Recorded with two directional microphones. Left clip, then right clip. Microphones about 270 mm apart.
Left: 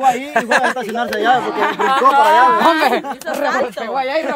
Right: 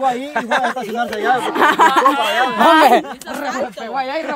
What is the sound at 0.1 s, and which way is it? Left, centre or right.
Speech, left.